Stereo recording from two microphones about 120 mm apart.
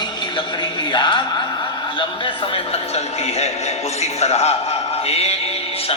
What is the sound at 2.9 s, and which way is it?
A man's voice, 60° left (ahead or behind).